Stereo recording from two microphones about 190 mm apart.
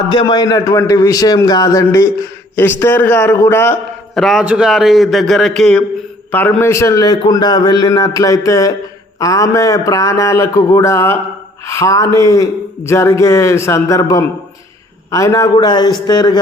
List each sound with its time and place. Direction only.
0.1 s a man's voice: 25° left (ahead or behind)
4.1 s a man's voice: centre (ahead or behind); by 16.4 s 20° left (ahead or behind)